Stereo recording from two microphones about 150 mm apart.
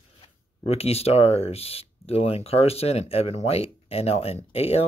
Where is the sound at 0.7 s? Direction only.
45° left (ahead or behind).